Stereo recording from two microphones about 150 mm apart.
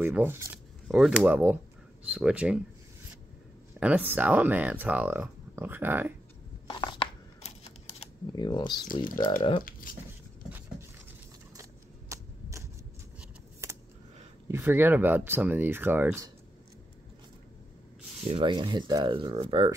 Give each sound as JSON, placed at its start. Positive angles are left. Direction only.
{"t": 0.0, "sound": "speech", "side_deg": -15}
{"t": 0.8, "sound": "speech", "side_deg": 0}
{"t": 1.2, "sound": "speech", "side_deg": -10}
{"t": 3.8, "sound": "speech", "side_deg": -10}
{"t": 6.7, "sound": "a sound", "side_deg": 35}
{"t": 8.4, "sound": "speech", "side_deg": 30}
{"t": 9.0, "sound": "speech", "side_deg": 65}
{"t": 12.1, "sound": "typewriter", "side_deg": -20}
{"t": 13.6, "sound": "a sound", "side_deg": -20}
{"t": 14.5, "sound": "speech", "side_deg": -15}
{"t": 18.3, "sound": "speech", "side_deg": -30}